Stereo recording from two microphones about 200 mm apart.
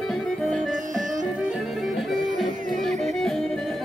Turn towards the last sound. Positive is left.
turn(degrees=0)  # may be behind; listen again after turning